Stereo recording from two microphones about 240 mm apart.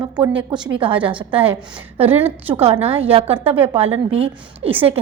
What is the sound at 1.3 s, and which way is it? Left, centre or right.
A woman's voice, centre.